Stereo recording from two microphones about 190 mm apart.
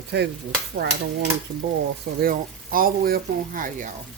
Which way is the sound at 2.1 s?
50° right (ahead or behind).